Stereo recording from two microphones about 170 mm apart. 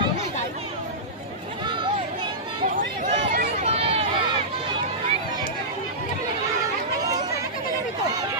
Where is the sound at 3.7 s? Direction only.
35° right (ahead or behind).